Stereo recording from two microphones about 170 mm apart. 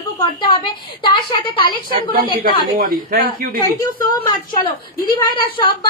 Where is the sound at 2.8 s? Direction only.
60° right (ahead or behind).